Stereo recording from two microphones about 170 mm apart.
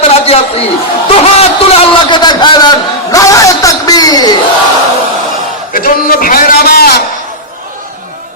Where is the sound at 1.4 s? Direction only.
35° left (ahead or behind).